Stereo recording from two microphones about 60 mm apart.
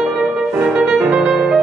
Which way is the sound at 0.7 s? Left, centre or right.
Centre.